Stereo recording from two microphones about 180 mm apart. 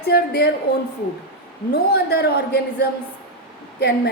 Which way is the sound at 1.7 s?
60° left (ahead or behind).